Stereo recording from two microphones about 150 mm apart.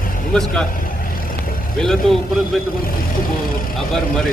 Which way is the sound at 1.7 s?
Centre (ahead or behind).